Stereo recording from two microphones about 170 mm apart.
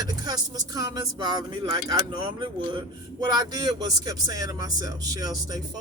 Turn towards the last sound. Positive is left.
turn(degrees=-20)  # may be behind; listen again after turning